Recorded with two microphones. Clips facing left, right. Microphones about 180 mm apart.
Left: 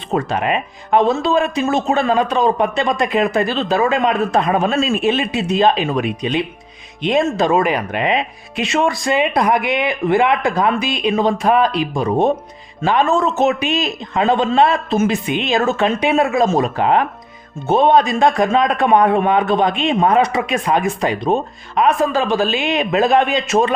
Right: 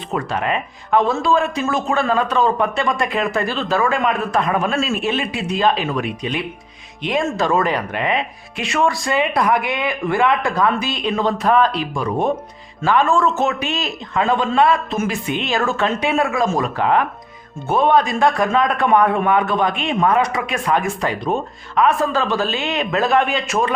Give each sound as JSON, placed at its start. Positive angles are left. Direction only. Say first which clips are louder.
{"t": 0.1, "sound": "speech", "louder": "left 3 dB", "side_deg": 20}